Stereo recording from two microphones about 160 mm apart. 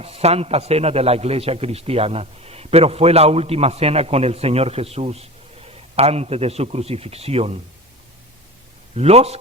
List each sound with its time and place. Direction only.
0.0 s a man's voice: 40° right (ahead or behind)
9.0 s a man's voice: 40° right (ahead or behind)